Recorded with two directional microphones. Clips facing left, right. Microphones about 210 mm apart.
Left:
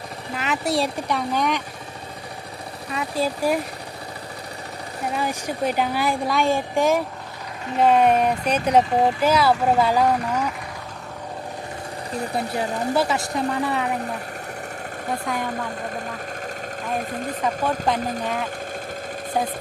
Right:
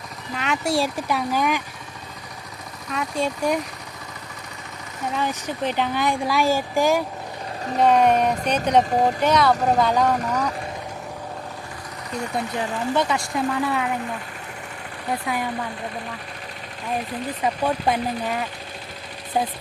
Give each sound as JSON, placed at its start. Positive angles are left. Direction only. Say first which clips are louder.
{"t": 0.3, "sound": "speech", "louder": "even", "side_deg": 0}
{"t": 2.9, "sound": "speech", "louder": "even", "side_deg": 5}
{"t": 5.1, "sound": "speech", "louder": "even", "side_deg": 10}
{"t": 12.1, "sound": "speech", "louder": "left 1 dB", "side_deg": 35}
{"t": 13.0, "sound": "speech", "louder": "even", "side_deg": 5}
{"t": 15.3, "sound": "speech", "louder": "right 1 dB", "side_deg": -5}
{"t": 17.0, "sound": "speech", "louder": "left 1 dB", "side_deg": 45}
{"t": 17.4, "sound": "speech", "louder": "right 1 dB", "side_deg": -10}